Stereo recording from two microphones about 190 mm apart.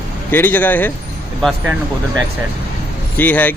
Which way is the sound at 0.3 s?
10° left (ahead or behind).